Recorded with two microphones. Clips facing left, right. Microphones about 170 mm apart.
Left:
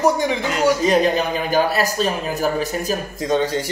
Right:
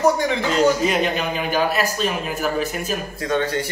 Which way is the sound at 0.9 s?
35° left (ahead or behind).